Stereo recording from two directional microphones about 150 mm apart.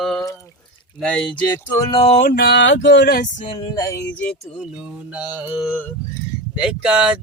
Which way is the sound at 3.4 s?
35° left (ahead or behind).